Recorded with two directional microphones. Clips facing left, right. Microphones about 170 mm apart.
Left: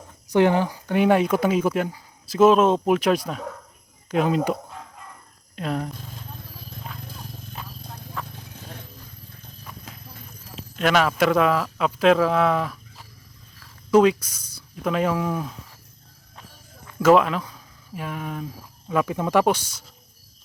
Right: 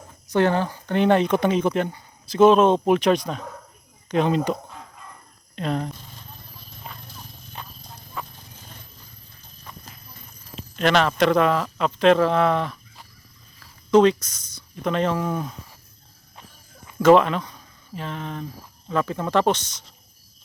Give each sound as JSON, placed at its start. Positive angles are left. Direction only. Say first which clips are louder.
{"t": 0.3, "sound": "speech", "louder": "left 2 dB", "side_deg": 15}
{"t": 5.5, "sound": "speech", "louder": "right 1 dB", "side_deg": 5}
{"t": 8.5, "sound": "a sound", "louder": "left 7 dB", "side_deg": 65}
{"t": 10.5, "sound": "speech", "louder": "right 1 dB", "side_deg": 5}
{"t": 17.0, "sound": "speech", "louder": "right 2 dB", "side_deg": 5}